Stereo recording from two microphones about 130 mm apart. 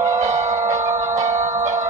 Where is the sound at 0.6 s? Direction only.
25° right (ahead or behind).